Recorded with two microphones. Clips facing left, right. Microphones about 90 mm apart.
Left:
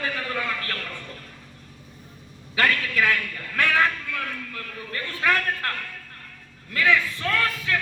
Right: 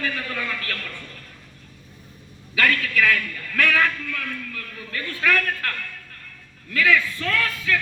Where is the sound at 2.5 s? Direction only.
25° left (ahead or behind).